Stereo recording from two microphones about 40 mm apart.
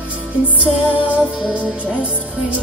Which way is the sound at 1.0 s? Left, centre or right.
Right.